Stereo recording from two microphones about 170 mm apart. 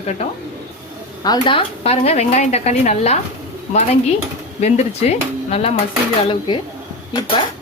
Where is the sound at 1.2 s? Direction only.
25° left (ahead or behind).